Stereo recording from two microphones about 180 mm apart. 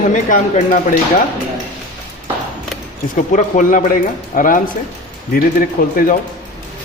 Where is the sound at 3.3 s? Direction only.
45° left (ahead or behind).